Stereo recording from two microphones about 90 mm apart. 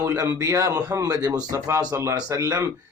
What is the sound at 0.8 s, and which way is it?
Speech, 45° right (ahead or behind).